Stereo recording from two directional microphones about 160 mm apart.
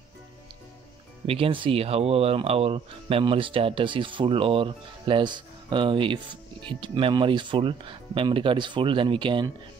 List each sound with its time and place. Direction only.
1.2 s speech: 35° right (ahead or behind)